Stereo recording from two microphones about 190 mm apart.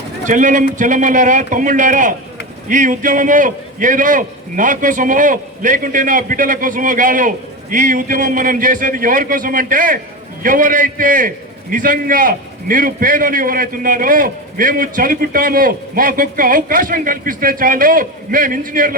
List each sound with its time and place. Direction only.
0.3 s a man's voice: 40° right (ahead or behind)